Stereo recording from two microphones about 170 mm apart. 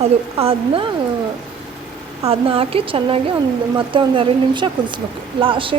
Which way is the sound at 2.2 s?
35° right (ahead or behind).